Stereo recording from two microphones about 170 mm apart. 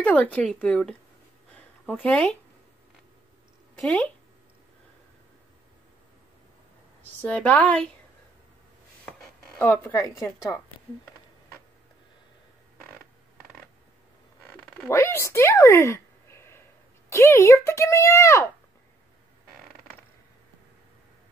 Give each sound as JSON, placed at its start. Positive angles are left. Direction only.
{"t": 0.0, "sound": "speech", "side_deg": 10}
{"t": 1.5, "sound": "a sound", "side_deg": 10}
{"t": 3.8, "sound": "speech", "side_deg": 10}
{"t": 7.0, "sound": "speech", "side_deg": 10}
{"t": 9.6, "sound": "speech", "side_deg": 10}
{"t": 14.8, "sound": "speech", "side_deg": 15}